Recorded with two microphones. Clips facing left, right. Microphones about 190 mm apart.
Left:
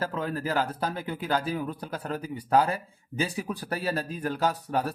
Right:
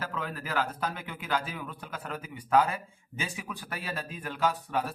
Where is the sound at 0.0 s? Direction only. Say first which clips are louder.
Left 6 dB; 35° left (ahead or behind).